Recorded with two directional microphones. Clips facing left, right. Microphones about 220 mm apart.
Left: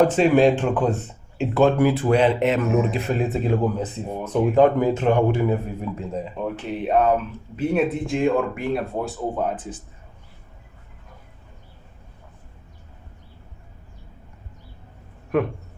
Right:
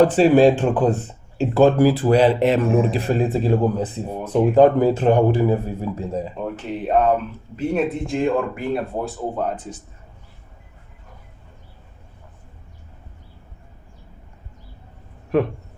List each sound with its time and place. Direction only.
0.0 s a man's voice: 35° right (ahead or behind)
6.3 s speech: centre (ahead or behind)